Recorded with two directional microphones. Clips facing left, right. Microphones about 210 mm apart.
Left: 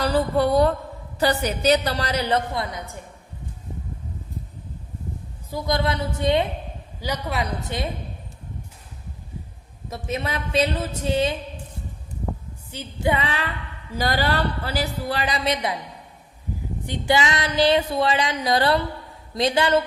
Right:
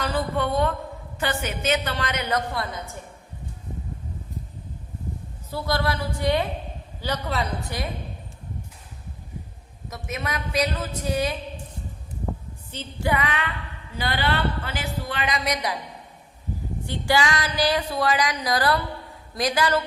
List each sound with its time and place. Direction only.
0.0 s a woman's voice: 35° left (ahead or behind)
2.5 s a woman's voice: 20° left (ahead or behind)
5.5 s a woman's voice: 15° left (ahead or behind)
7.7 s speech: 25° left (ahead or behind)
9.9 s speech: 30° left (ahead or behind)
12.7 s a woman's voice: 15° left (ahead or behind)
16.8 s speech: 20° left (ahead or behind)